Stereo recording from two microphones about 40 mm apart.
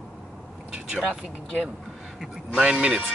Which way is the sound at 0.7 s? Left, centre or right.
Right.